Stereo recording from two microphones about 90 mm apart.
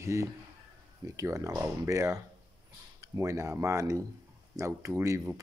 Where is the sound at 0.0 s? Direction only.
35° right (ahead or behind).